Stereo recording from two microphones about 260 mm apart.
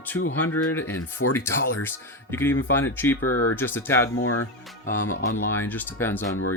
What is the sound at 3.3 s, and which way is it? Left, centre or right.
Speech, left.